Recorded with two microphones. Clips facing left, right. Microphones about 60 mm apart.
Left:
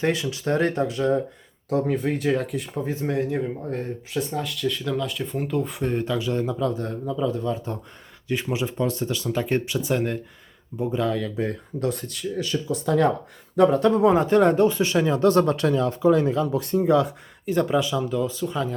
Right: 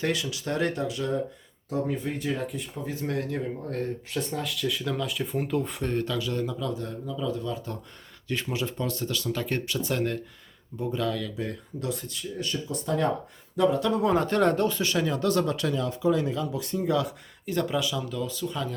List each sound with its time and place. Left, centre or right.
0.0 s speech: left
1.7 s speech: left
2.8 s speech: left
8.3 s speech: centre; by 11.9 s left
11.9 s speech: left
13.6 s speech: left
14.0 s speech: centre